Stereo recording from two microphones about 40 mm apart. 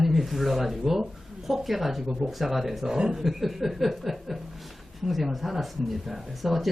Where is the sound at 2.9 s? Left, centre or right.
Centre.